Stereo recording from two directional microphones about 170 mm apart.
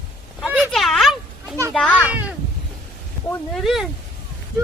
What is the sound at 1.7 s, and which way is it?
Children playing, 5° left (ahead or behind).